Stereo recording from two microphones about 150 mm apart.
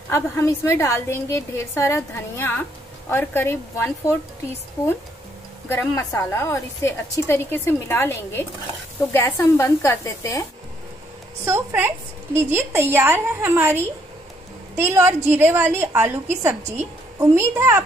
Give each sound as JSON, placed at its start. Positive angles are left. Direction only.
{"t": 0.1, "sound": "a woman's voice", "side_deg": 20}
{"t": 5.7, "sound": "a woman's voice", "side_deg": 15}
{"t": 11.4, "sound": "a woman's voice", "side_deg": -15}